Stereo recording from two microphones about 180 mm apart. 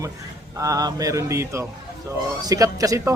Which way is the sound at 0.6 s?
20° right (ahead or behind).